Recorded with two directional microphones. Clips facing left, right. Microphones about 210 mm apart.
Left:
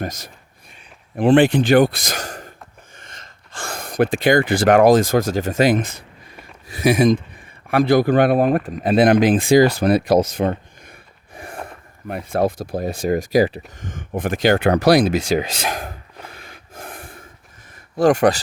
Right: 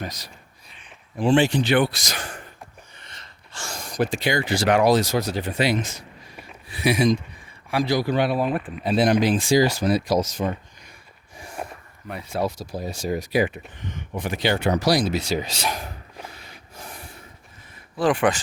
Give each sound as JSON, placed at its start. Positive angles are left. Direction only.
{"t": 0.0, "sound": "a man's voice", "side_deg": 50}
{"t": 6.7, "sound": "speech", "side_deg": 45}
{"t": 15.8, "sound": "cough", "side_deg": 50}
{"t": 17.9, "sound": "speech", "side_deg": 45}